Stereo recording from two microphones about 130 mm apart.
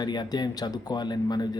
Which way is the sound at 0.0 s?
35° left (ahead or behind).